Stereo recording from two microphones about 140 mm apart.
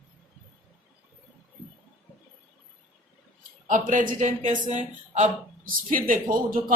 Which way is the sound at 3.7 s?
65° right (ahead or behind).